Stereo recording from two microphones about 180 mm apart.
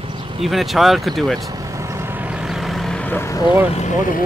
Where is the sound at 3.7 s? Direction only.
40° left (ahead or behind).